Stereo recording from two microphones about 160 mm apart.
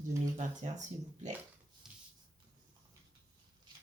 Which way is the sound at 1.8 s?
5° right (ahead or behind).